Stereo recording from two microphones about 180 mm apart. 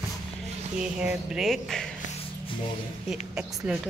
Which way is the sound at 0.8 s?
5° right (ahead or behind).